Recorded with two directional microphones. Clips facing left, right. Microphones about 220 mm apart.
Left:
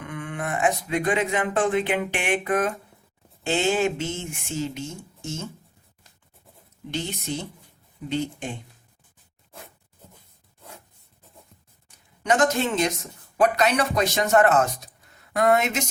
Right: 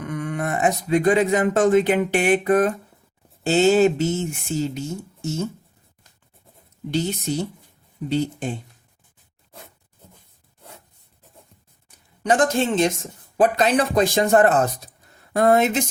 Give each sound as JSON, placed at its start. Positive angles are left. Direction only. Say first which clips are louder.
{"t": 0.0, "sound": "speech", "louder": "right 5 dB", "side_deg": -40}
{"t": 6.9, "sound": "speech", "louder": "right 6 dB", "side_deg": -40}
{"t": 12.2, "sound": "a woman's voice", "louder": "right 2 dB", "side_deg": -35}